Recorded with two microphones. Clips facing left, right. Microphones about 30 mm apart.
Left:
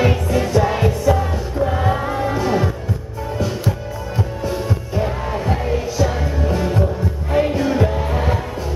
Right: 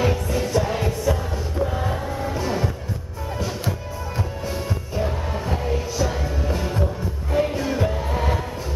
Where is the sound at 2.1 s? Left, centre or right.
Left.